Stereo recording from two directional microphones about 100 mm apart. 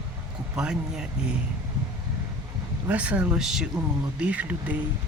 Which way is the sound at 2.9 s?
10° right (ahead or behind).